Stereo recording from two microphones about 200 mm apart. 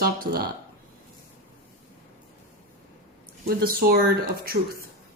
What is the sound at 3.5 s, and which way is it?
A woman's voice, 50° right (ahead or behind).